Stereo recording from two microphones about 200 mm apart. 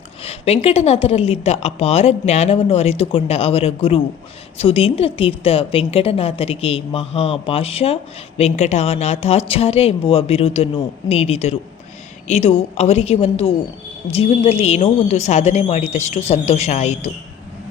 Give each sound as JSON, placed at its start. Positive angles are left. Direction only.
{"t": 0.2, "sound": "a woman's voice", "side_deg": 30}